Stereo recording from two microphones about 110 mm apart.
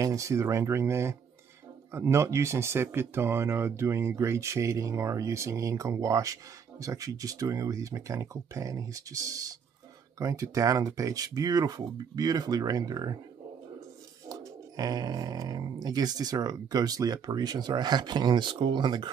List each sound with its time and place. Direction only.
0.0 s speech: 30° right (ahead or behind)
14.3 s speech: 35° right (ahead or behind)